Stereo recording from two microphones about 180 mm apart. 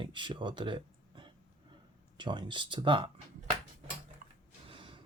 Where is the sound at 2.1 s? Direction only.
25° right (ahead or behind).